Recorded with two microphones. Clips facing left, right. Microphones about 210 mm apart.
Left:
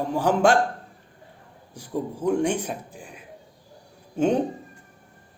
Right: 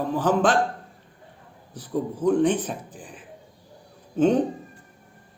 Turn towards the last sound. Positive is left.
turn(degrees=10)  # may be behind; listen again after turning